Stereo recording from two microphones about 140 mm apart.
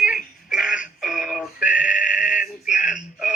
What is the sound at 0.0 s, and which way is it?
Synthetic singing, 5° right (ahead or behind).